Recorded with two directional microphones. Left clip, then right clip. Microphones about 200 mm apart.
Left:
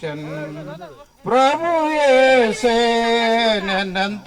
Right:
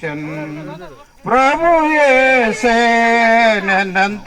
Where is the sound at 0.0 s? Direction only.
55° left (ahead or behind).